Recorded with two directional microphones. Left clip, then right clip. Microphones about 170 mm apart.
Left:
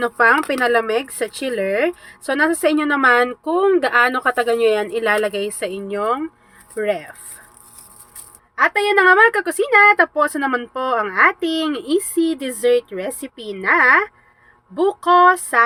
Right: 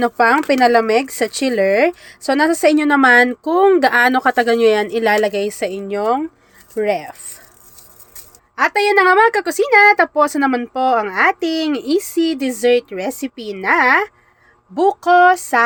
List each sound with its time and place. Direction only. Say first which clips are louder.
0.0 s speech: right 1 dB; 25° right (ahead or behind)
8.5 s speech: right 2 dB; 20° right (ahead or behind)